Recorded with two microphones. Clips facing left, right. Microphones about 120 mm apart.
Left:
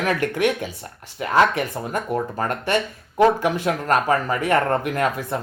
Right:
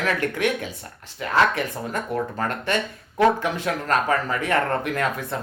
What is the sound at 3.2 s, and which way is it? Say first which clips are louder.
Speech: left 2 dB; 15° left (ahead or behind).